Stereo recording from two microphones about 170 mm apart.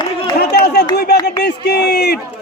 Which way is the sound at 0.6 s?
75° left (ahead or behind).